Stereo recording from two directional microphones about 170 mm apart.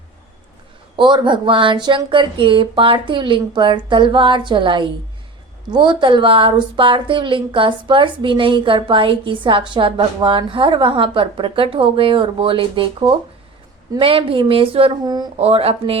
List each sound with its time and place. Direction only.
0.9 s a woman's voice: 30° right (ahead or behind)
15.4 s a woman's voice: 35° right (ahead or behind)